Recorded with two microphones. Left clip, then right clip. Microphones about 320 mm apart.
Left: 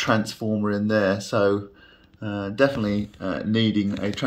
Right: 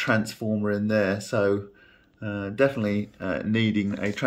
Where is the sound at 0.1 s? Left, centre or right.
Centre.